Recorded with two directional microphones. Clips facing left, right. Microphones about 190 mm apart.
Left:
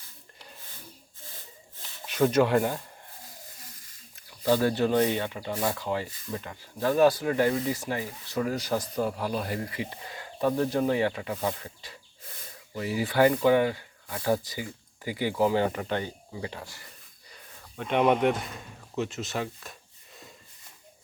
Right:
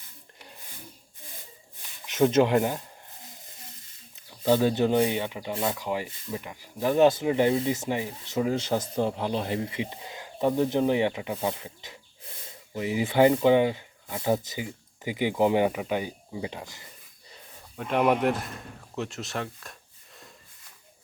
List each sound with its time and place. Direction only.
2.0 s a sound: 20° right (ahead or behind)
5.7 s speech: 15° right (ahead or behind)
17.7 s speech: 5° right (ahead or behind)